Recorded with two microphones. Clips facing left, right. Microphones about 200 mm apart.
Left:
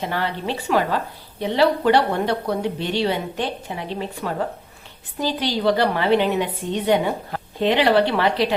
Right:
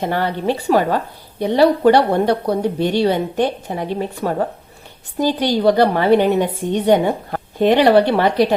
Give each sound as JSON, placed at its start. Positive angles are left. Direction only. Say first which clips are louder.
{"t": 0.0, "sound": "a woman's voice", "louder": "right 6 dB", "side_deg": -45}
{"t": 5.5, "sound": "a woman's voice", "louder": "right 5 dB", "side_deg": -45}